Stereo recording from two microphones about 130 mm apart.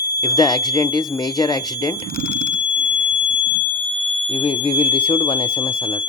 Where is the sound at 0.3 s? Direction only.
35° left (ahead or behind).